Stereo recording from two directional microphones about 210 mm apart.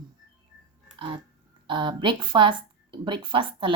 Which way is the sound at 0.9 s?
25° right (ahead or behind).